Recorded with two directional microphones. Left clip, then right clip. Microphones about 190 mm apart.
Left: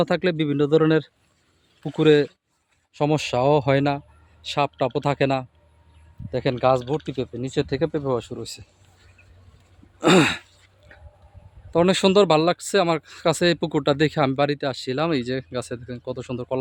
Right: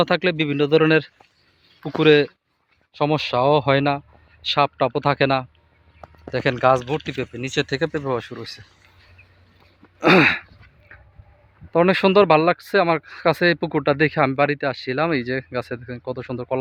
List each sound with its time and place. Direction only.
0.0 s speech: 15° left (ahead or behind)
10.0 s a sound: 10° left (ahead or behind)
11.7 s speech: 5° left (ahead or behind)